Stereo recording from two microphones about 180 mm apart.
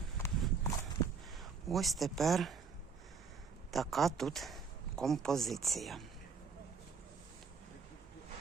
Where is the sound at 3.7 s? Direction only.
Centre (ahead or behind).